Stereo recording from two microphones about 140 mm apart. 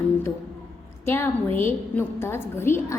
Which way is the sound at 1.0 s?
15° left (ahead or behind).